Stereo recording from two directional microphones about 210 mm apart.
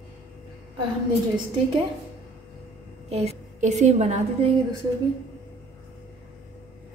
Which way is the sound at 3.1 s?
30° right (ahead or behind).